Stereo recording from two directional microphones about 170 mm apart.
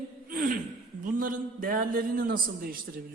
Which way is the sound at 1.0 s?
55° right (ahead or behind).